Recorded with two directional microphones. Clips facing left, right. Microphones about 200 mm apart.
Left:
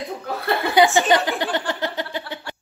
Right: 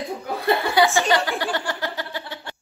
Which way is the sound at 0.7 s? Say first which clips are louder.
Left 5 dB; 20° left (ahead or behind).